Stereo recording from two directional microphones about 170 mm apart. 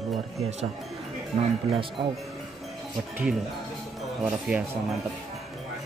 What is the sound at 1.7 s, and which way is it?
Music, 30° right (ahead or behind).